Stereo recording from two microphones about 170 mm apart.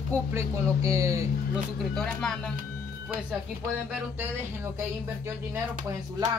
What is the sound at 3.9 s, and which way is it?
Speech, 10° right (ahead or behind).